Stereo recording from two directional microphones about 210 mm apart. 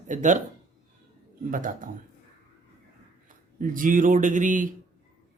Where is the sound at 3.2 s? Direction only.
40° right (ahead or behind).